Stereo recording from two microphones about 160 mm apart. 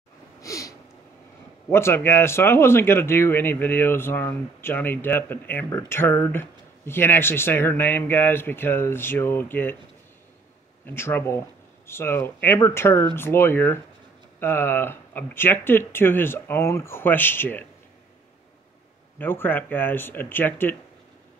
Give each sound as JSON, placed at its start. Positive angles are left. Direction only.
{"t": 0.4, "sound": "a sound", "side_deg": 20}
{"t": 1.7, "sound": "speech", "side_deg": 15}
{"t": 10.9, "sound": "speech", "side_deg": 15}
{"t": 19.1, "sound": "speech", "side_deg": 15}